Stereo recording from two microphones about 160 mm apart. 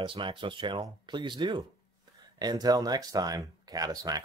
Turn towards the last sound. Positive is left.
turn(degrees=-25)  # may be behind; listen again after turning